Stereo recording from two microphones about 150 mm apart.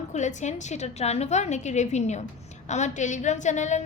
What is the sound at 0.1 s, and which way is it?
A woman's voice, 50° left (ahead or behind).